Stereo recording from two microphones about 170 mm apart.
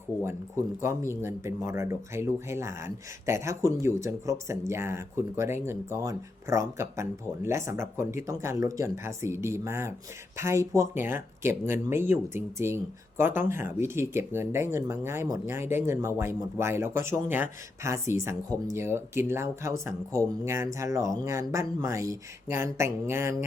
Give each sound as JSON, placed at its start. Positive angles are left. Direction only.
{"t": 0.2, "sound": "speech", "side_deg": -15}